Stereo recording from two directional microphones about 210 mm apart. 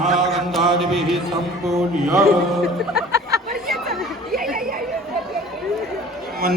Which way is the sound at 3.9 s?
45° right (ahead or behind).